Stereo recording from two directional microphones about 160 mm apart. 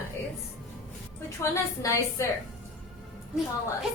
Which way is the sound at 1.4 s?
20° left (ahead or behind).